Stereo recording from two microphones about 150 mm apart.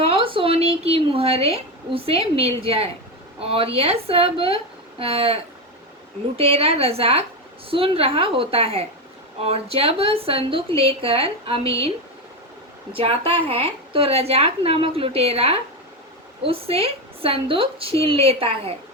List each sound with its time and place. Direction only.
0.0 s a sound: 40° right (ahead or behind)
0.9 s a woman's voice: 40° right (ahead or behind)
11.6 s speech: 20° left (ahead or behind)
12.9 s a woman's voice: 40° right (ahead or behind)